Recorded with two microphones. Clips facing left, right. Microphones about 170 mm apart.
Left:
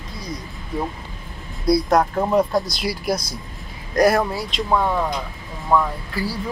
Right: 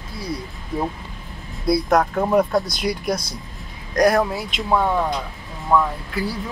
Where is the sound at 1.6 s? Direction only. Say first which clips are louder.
Left 1 dB; centre (ahead or behind).